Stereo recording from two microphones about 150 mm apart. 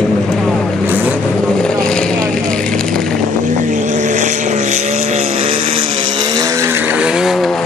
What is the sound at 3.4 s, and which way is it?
Vehicle, 60° right (ahead or behind).